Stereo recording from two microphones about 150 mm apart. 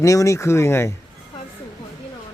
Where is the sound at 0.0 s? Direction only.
20° left (ahead or behind).